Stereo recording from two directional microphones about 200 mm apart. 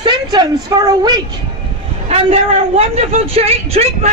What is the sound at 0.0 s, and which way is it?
A woman's voice, 20° right (ahead or behind).